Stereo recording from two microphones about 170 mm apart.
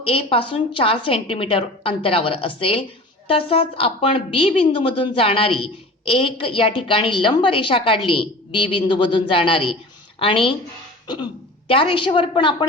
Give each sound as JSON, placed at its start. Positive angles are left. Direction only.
{"t": 0.0, "sound": "a woman's voice", "side_deg": 30}
{"t": 11.0, "sound": "throat clearing", "side_deg": 25}
{"t": 11.7, "sound": "a woman's voice", "side_deg": 30}